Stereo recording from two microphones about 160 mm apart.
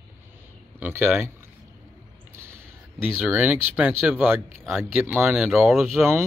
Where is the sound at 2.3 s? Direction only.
15° right (ahead or behind).